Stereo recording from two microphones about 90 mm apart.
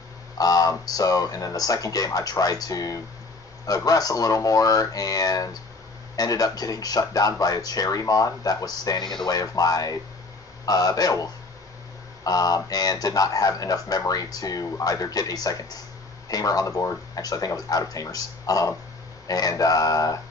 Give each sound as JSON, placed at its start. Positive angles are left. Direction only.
{"t": 0.4, "sound": "speech", "side_deg": 45}